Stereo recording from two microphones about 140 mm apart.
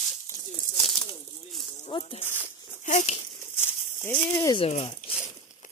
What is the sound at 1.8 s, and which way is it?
Snake, 35° left (ahead or behind).